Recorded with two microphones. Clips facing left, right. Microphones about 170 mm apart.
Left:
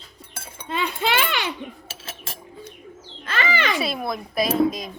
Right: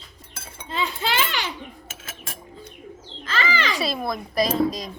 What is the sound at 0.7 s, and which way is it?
Children playing, 60° left (ahead or behind).